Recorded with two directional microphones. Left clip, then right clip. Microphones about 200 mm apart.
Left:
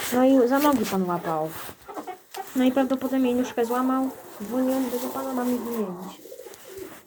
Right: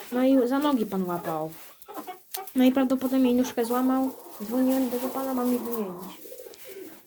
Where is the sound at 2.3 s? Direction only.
20° right (ahead or behind).